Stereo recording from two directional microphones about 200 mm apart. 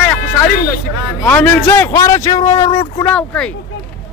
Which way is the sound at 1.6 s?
15° left (ahead or behind).